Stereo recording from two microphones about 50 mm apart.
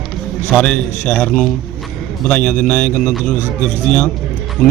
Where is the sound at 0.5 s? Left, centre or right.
Centre.